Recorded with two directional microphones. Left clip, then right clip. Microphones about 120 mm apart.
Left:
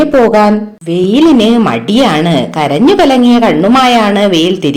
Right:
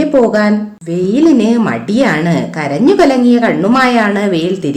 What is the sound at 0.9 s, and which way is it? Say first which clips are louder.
A woman's voice: left 3 dB; 25° left (ahead or behind).